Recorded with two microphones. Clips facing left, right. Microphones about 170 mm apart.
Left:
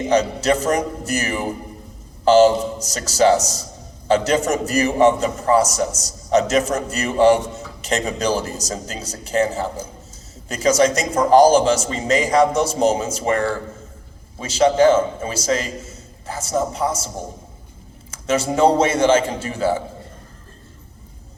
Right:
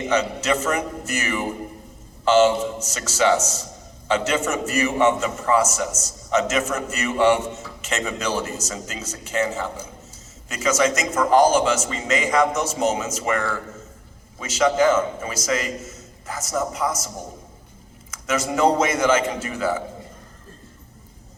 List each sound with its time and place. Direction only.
0.0 s a man's voice: 35° left (ahead or behind)